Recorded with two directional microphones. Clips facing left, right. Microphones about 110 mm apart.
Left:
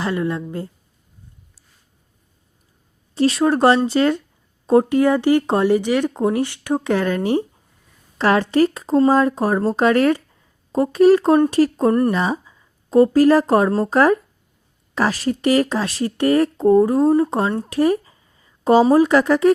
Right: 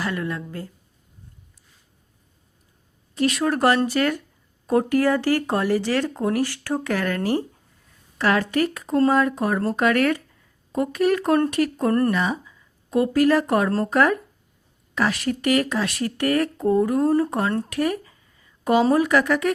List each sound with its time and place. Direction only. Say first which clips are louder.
0.0 s speech: left 5 dB; 25° left (ahead or behind)
3.2 s speech: left 5 dB; 30° left (ahead or behind)
8.2 s speech: left 5 dB; 30° left (ahead or behind)
13.7 s speech: left 4 dB; 5° left (ahead or behind)
13.9 s speech: left 4 dB; 30° left (ahead or behind)